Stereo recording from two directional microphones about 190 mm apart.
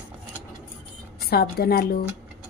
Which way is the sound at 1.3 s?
55° left (ahead or behind).